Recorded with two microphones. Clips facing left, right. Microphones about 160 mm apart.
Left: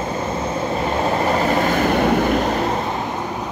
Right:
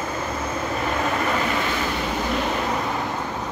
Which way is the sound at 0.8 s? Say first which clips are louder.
Left 5 dB; 30° left (ahead or behind).